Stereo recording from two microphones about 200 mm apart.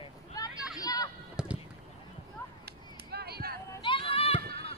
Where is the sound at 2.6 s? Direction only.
55° right (ahead or behind).